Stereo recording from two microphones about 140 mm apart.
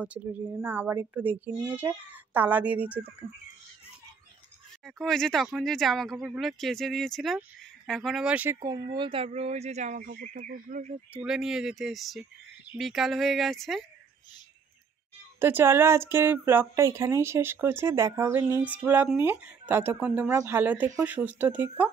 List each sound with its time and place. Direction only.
0.0 s speech: 10° right (ahead or behind)
4.8 s speech: 5° left (ahead or behind)
8.6 s speech: 30° right (ahead or behind); by 10.9 s 70° right (ahead or behind)
11.2 s speech: 5° right (ahead or behind)
15.3 s speech: 15° right (ahead or behind)